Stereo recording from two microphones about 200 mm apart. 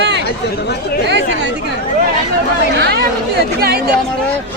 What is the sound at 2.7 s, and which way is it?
Speech, 55° right (ahead or behind).